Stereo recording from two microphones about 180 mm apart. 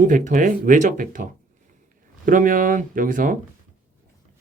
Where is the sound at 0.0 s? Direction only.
45° right (ahead or behind).